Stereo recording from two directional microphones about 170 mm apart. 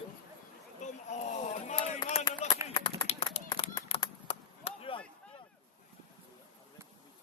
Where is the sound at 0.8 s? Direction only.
45° left (ahead or behind).